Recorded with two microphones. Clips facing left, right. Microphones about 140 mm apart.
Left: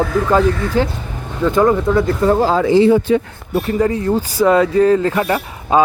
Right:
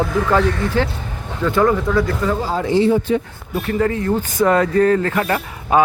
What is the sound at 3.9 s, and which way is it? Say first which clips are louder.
Speech: left 2 dB; 15° left (ahead or behind).